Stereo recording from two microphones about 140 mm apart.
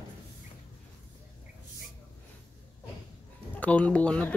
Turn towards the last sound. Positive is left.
turn(degrees=10)  # may be behind; listen again after turning